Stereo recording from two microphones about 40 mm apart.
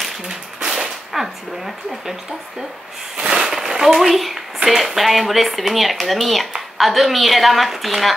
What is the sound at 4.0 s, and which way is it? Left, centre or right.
Speech, centre.